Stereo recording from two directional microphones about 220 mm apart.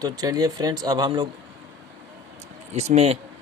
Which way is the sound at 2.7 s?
30° right (ahead or behind).